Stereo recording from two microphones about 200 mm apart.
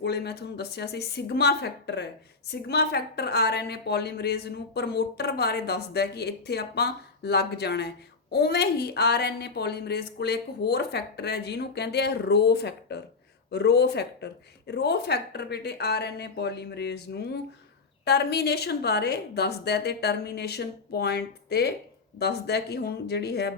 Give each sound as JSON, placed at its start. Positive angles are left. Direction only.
{"t": 0.0, "sound": "a woman's voice", "side_deg": 55}